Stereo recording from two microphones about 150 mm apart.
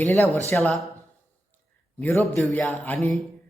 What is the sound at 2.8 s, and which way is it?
Speech, 10° left (ahead or behind).